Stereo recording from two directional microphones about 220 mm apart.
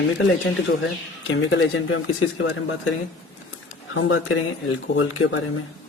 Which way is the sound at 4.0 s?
60° left (ahead or behind).